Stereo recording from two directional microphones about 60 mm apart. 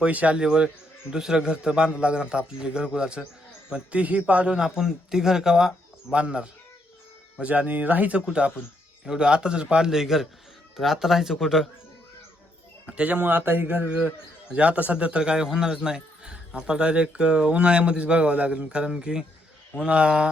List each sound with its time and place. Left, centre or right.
0.0 s speech: right; by 11.7 s centre
13.0 s speech: right
13.8 s speech: centre